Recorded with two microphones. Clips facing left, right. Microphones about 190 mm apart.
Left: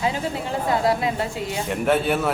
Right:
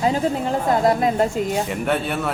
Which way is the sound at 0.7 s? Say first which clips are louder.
Right 3 dB; 50° right (ahead or behind).